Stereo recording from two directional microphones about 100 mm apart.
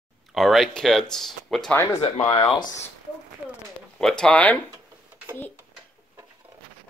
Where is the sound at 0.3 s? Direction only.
Centre (ahead or behind).